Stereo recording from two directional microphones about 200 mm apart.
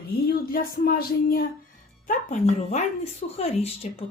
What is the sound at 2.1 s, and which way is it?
Speech, 35° left (ahead or behind).